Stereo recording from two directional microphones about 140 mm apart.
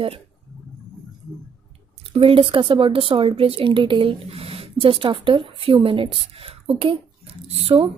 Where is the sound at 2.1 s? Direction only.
40° right (ahead or behind).